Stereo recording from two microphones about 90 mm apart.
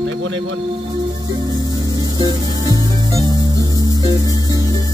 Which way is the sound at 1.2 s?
50° right (ahead or behind).